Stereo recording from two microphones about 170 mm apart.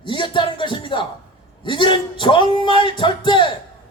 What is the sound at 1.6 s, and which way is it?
Speech, 30° left (ahead or behind).